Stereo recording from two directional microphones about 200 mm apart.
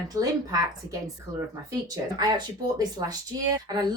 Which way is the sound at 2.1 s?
20° right (ahead or behind).